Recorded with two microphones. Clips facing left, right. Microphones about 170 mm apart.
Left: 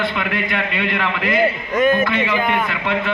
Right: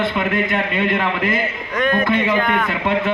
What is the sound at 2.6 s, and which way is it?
Speech, 45° right (ahead or behind).